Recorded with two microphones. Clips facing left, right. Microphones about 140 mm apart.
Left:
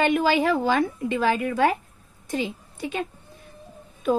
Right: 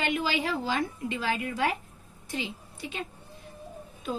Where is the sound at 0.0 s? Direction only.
50° left (ahead or behind).